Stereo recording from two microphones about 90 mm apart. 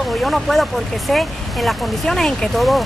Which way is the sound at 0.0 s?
Centre (ahead or behind).